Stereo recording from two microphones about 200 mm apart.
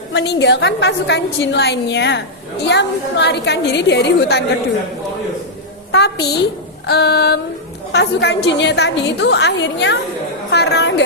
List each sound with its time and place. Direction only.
0.1 s a woman's voice: 60° left (ahead or behind)
5.9 s a woman's voice: 55° left (ahead or behind)